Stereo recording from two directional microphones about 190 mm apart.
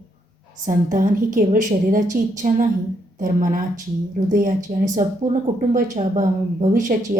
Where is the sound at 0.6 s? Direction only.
45° right (ahead or behind).